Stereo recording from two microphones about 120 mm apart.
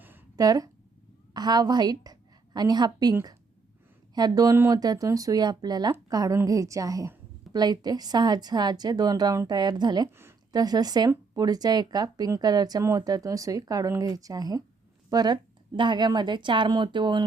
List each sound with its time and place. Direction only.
0.3 s a woman's voice: 30° right (ahead or behind)